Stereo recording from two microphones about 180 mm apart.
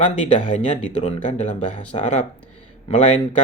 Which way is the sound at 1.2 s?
45° left (ahead or behind).